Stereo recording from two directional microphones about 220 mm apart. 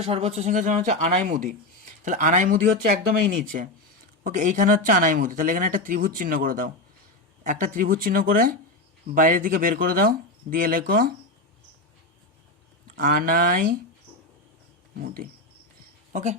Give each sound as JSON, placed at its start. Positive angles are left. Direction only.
{"t": 0.0, "sound": "speech", "side_deg": -25}
{"t": 4.2, "sound": "speech", "side_deg": -35}
{"t": 13.0, "sound": "speech", "side_deg": -40}
{"t": 14.9, "sound": "speech", "side_deg": -40}